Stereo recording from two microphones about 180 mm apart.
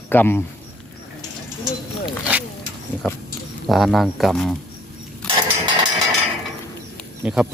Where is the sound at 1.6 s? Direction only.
5° right (ahead or behind).